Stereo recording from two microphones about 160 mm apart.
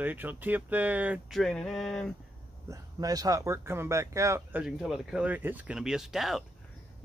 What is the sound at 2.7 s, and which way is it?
Speech, 20° right (ahead or behind).